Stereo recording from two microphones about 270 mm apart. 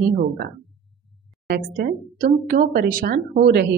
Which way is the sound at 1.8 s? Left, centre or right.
Right.